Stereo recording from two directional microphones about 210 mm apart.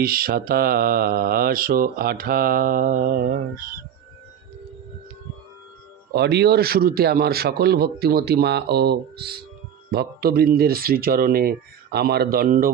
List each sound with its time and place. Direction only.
0.0 s mantra: 45° right (ahead or behind)
6.1 s mantra: 50° right (ahead or behind)